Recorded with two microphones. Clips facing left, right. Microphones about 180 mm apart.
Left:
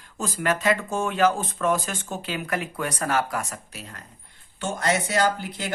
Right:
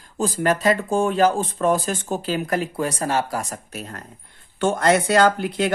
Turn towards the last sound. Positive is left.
turn(degrees=-65)  # may be behind; listen again after turning